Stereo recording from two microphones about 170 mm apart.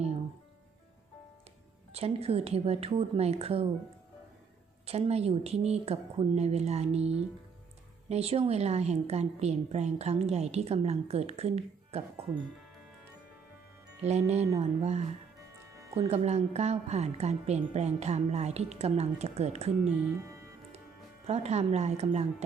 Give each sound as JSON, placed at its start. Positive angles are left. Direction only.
{"t": 1.9, "sound": "a woman's voice", "side_deg": -35}
{"t": 4.9, "sound": "a woman's voice", "side_deg": -40}
{"t": 14.0, "sound": "a woman's voice", "side_deg": -40}
{"t": 19.9, "sound": "speech", "side_deg": -5}
{"t": 21.2, "sound": "a woman's voice", "side_deg": -40}